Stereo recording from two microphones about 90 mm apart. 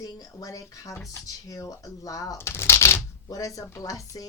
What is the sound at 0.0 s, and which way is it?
Speech, 45° left (ahead or behind).